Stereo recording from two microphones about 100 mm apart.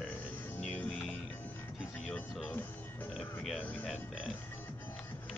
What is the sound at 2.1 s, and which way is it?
Music, 15° left (ahead or behind).